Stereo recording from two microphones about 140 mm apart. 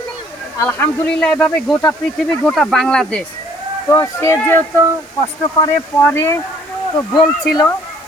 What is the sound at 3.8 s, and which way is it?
Speech, 20° left (ahead or behind).